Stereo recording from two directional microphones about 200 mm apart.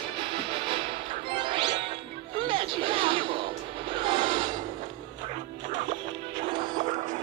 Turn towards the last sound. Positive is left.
turn(degrees=-25)  # may be behind; listen again after turning